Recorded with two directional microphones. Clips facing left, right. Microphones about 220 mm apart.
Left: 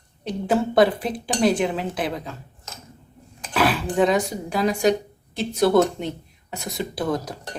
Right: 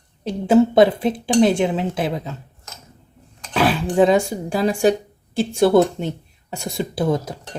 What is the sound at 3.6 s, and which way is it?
Speech, 25° right (ahead or behind).